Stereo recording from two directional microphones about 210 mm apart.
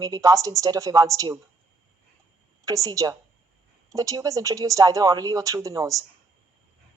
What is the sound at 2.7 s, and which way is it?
A woman's voice, 15° right (ahead or behind).